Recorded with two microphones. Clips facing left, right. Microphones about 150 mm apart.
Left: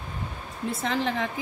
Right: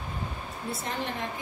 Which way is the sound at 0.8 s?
90° left.